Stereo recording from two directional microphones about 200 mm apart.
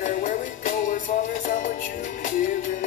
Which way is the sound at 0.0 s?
40° left (ahead or behind).